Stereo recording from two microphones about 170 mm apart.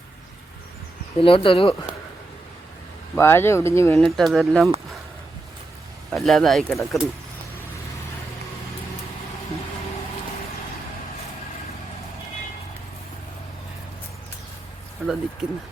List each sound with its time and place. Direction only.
1.2 s speech: 30° left (ahead or behind)
3.2 s speech: 15° left (ahead or behind)
4.0 s speech: centre (ahead or behind)
6.1 s speech: centre (ahead or behind)
15.0 s speech: 5° right (ahead or behind)